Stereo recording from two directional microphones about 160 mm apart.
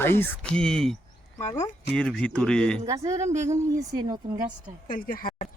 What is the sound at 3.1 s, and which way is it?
Speech, 45° right (ahead or behind).